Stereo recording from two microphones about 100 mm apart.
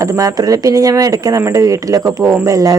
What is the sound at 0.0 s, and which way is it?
Speech, 35° right (ahead or behind).